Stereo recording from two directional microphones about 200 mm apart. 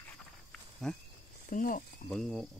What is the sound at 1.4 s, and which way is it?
Speech, 40° left (ahead or behind).